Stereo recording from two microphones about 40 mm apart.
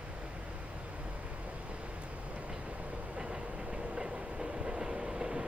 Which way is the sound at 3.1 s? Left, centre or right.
Right.